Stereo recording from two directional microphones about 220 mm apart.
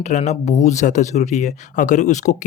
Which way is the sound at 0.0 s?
30° left (ahead or behind).